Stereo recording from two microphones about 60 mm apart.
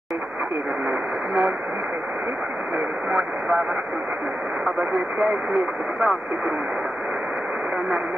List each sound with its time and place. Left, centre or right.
3.1 s speech: right
5.3 s speech: right